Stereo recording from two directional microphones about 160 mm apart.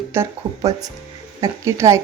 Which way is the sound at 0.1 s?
20° right (ahead or behind).